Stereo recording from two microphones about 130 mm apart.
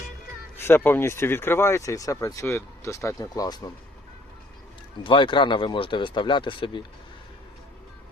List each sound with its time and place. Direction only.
0.9 s speech: 20° left (ahead or behind)
5.0 s speech: 40° left (ahead or behind)